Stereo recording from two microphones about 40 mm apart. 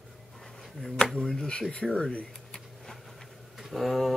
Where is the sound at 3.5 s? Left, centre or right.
Centre.